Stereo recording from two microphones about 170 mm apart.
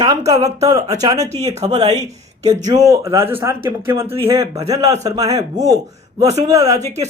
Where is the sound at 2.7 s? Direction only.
20° right (ahead or behind).